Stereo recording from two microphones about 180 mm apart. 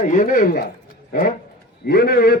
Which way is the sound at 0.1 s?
45° left (ahead or behind).